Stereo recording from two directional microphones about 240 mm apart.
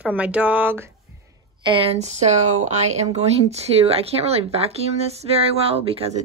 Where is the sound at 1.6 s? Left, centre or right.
Right.